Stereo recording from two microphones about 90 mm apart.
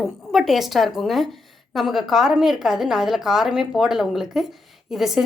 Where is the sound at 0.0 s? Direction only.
5° right (ahead or behind).